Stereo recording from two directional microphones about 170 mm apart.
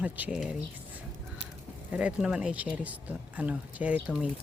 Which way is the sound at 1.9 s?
5° right (ahead or behind).